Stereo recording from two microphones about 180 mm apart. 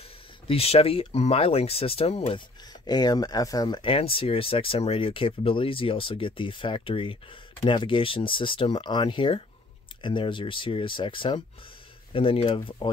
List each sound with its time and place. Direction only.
0.5 s speech: 35° left (ahead or behind)